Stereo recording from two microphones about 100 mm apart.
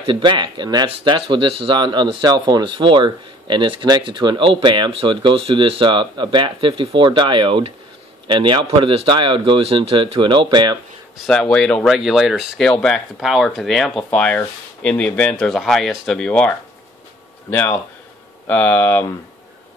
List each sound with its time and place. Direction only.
0.0 s speech: 55° right (ahead or behind)
11.2 s speech: 5° left (ahead or behind)
12.6 s speech: 10° left (ahead or behind)
13.2 s speech: 5° right (ahead or behind)
14.1 s speech: 15° left (ahead or behind)
17.5 s speech: 25° left (ahead or behind)